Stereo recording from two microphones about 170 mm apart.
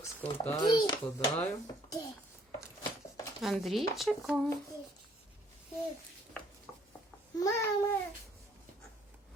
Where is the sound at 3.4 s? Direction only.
Centre (ahead or behind).